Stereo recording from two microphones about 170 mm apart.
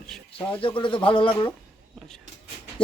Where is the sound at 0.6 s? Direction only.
30° left (ahead or behind).